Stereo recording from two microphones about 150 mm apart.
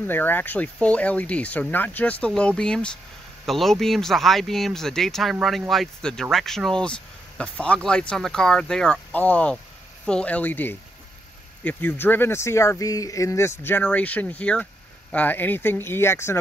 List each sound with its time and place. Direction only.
0.0 s speech: 15° left (ahead or behind)